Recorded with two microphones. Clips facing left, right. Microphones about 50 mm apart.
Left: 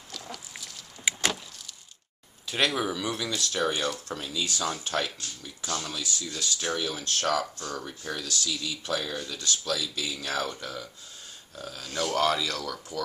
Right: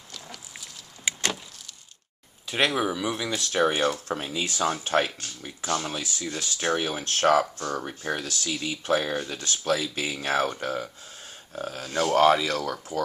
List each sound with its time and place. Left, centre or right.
1.1 s vehicle: centre
2.4 s speech: centre
3.3 s speech: right